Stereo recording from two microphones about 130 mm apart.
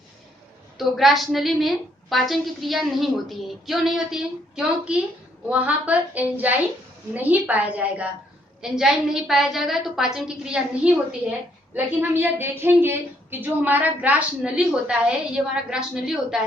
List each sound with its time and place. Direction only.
0.8 s a woman's voice: centre (ahead or behind)